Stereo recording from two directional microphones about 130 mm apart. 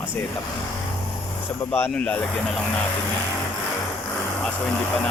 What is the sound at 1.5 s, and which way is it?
Speech, 15° left (ahead or behind).